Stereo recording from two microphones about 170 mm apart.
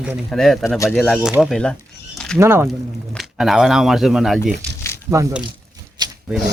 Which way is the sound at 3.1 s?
Centre (ahead or behind).